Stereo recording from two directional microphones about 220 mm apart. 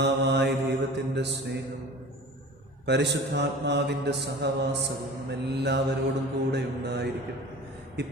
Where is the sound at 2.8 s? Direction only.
50° right (ahead or behind).